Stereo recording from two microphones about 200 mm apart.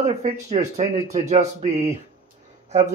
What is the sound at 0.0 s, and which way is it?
Speech, 35° right (ahead or behind).